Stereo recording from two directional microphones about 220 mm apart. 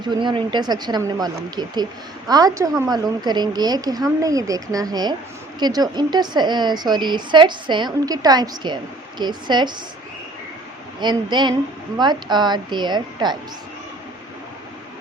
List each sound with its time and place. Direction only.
0.0 s a woman's voice: 20° right (ahead or behind)
11.0 s a woman's voice: 20° right (ahead or behind)